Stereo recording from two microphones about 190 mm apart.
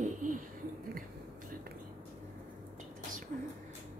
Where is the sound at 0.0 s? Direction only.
40° right (ahead or behind).